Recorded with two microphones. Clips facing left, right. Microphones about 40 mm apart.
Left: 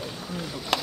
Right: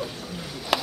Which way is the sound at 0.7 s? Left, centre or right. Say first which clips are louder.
Right 2 dB; centre.